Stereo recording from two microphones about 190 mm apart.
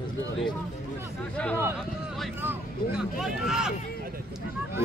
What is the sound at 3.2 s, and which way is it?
Speech, centre (ahead or behind).